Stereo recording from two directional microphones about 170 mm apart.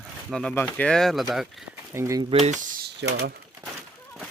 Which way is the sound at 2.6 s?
60° right (ahead or behind).